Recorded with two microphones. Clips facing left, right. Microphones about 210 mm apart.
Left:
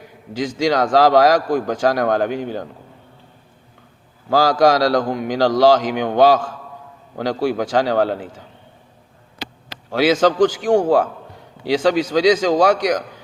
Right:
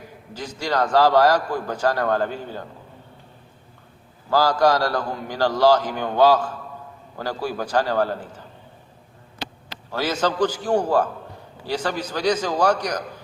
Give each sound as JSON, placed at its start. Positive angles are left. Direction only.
{"t": 0.3, "sound": "a man's voice", "side_deg": 90}
{"t": 4.3, "sound": "a man's voice", "side_deg": 90}
{"t": 9.9, "sound": "a man's voice", "side_deg": 90}